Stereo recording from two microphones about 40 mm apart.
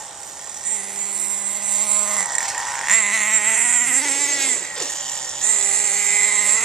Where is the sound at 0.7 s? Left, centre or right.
Centre.